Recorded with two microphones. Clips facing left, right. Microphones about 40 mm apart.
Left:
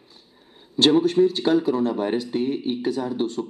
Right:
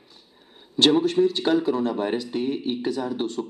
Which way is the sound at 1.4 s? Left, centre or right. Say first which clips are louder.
Left 2 dB; right.